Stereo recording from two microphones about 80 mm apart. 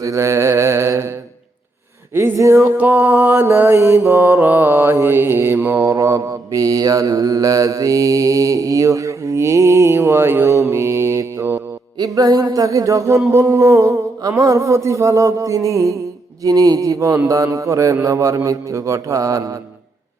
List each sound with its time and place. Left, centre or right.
0.0 s mantra: right
2.1 s music: right
2.7 s mantra: right
5.9 s mantra: right
11.9 s music: right
16.4 s mantra: right